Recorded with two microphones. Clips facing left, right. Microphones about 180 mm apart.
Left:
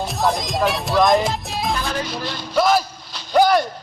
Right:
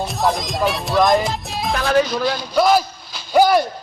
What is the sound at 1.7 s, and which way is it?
Speech, 65° right (ahead or behind).